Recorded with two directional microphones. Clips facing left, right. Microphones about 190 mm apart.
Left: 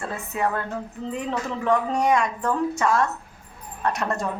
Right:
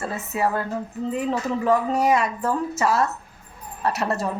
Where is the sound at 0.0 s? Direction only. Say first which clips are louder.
Right 2 dB; 5° right (ahead or behind).